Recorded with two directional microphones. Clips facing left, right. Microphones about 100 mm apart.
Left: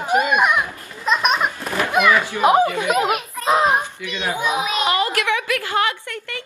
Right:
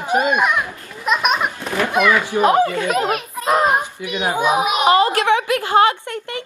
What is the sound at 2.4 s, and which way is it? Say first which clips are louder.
Speech: right 2 dB; 15° left (ahead or behind).